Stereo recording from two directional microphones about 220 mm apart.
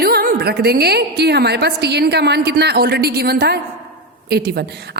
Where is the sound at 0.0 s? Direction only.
45° right (ahead or behind).